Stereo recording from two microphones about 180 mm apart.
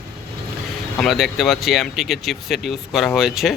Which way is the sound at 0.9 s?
Centre (ahead or behind).